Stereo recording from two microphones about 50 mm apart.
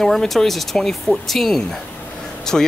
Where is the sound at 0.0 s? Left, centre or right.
Centre.